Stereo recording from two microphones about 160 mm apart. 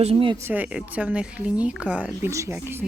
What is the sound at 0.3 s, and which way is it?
Speech, 10° right (ahead or behind).